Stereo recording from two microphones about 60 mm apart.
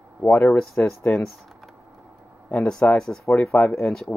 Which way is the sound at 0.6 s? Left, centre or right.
Centre.